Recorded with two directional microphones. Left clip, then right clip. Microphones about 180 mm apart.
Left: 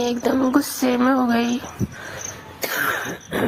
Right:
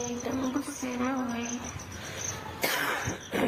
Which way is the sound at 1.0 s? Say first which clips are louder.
Left 12 dB; 45° left (ahead or behind).